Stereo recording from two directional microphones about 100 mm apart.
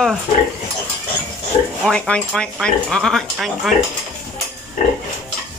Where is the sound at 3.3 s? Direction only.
5° right (ahead or behind).